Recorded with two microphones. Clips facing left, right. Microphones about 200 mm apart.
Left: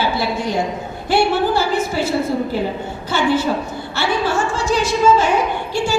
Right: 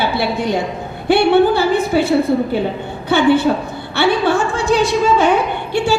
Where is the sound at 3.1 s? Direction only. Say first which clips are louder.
Right 5 dB; 60° right (ahead or behind).